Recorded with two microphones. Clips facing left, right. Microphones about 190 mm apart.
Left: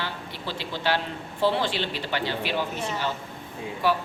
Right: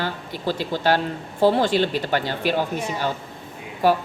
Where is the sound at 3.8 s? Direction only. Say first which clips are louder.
Right 6 dB; 45° right (ahead or behind).